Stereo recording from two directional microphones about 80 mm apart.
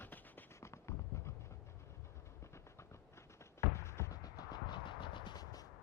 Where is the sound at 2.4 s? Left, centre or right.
Left.